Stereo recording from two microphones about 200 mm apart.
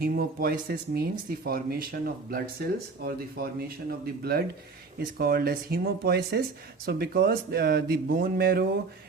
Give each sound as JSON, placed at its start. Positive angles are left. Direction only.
{"t": 0.0, "sound": "speech", "side_deg": -50}